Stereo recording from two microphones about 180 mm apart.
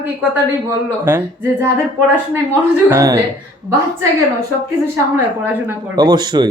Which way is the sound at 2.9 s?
20° right (ahead or behind).